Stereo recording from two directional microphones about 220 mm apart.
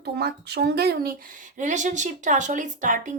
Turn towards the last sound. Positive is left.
turn(degrees=-35)  # may be behind; listen again after turning